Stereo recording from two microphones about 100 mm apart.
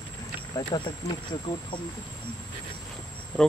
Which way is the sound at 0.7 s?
55° left (ahead or behind).